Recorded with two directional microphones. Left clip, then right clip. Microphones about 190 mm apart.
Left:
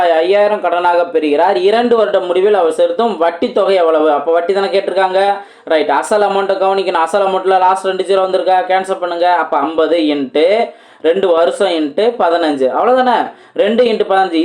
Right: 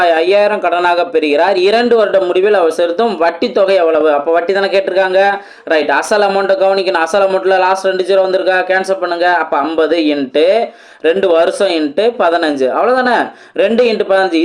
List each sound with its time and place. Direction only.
0.0 s speech: 25° right (ahead or behind)